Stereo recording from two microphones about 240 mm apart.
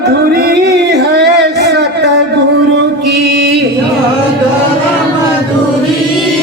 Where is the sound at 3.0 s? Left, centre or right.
Right.